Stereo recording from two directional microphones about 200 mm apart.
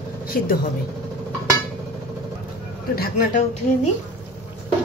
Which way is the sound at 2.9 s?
45° left (ahead or behind).